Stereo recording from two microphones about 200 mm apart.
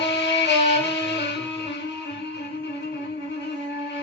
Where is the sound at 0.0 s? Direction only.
60° left (ahead or behind).